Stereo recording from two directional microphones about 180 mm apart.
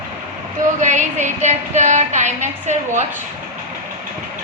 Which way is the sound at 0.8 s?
45° right (ahead or behind).